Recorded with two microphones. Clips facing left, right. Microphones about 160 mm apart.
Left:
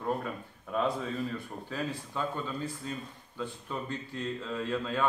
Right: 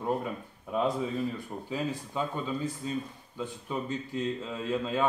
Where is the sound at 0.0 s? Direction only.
15° right (ahead or behind).